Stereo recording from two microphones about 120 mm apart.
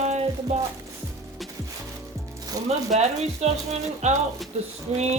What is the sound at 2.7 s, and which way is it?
Speech, 65° right (ahead or behind).